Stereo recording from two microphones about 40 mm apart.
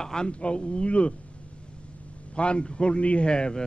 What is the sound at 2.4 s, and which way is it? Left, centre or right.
A man's voice, left.